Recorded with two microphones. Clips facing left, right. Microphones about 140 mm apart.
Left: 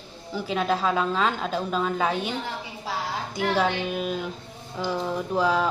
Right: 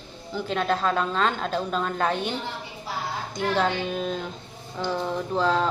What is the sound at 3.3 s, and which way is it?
A woman's voice, 5° left (ahead or behind).